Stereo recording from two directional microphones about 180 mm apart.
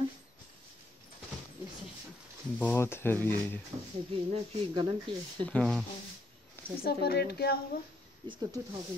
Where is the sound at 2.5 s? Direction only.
10° left (ahead or behind).